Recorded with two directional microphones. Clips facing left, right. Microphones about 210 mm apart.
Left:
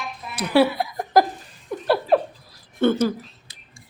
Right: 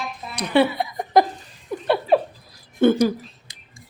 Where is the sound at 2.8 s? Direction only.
10° right (ahead or behind).